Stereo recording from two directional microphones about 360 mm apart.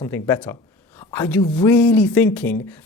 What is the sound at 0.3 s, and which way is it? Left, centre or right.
Speech, centre.